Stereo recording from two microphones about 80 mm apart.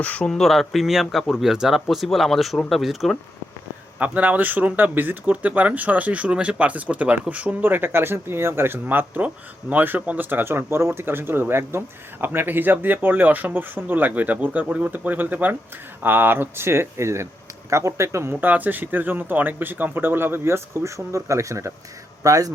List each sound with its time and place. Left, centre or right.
0.0 s speech: centre
0.3 s speech: centre
4.0 s a man's voice: centre; by 22.5 s right